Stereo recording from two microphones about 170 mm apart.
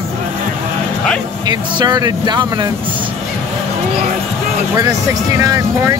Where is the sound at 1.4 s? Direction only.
25° right (ahead or behind).